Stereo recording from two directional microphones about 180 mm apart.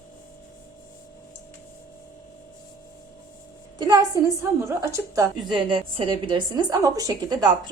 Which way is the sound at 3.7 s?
25° right (ahead or behind).